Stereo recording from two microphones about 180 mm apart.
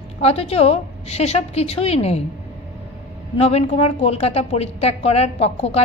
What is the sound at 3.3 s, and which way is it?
A woman's voice, 35° left (ahead or behind).